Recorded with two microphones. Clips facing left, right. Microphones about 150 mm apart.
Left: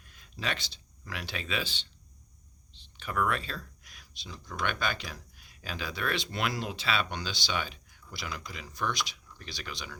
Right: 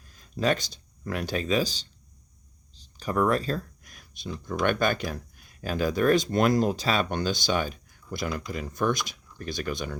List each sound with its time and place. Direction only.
0.0 s speech: 40° right (ahead or behind)